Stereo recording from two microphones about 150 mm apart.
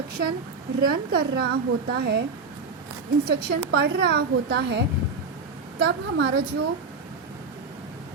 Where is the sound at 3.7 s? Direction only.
90° right.